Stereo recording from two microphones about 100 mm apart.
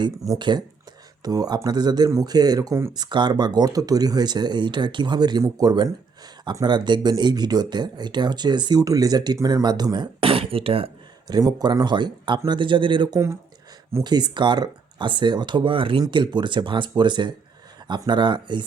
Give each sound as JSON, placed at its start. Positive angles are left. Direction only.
{"t": 0.3, "sound": "speech", "side_deg": -50}
{"t": 2.0, "sound": "speech", "side_deg": -30}
{"t": 2.3, "sound": "speech", "side_deg": -40}
{"t": 10.2, "sound": "speech", "side_deg": -65}
{"t": 11.3, "sound": "speech", "side_deg": -45}